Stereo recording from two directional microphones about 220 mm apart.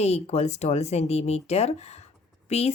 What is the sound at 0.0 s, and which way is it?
A woman's voice, 30° left (ahead or behind).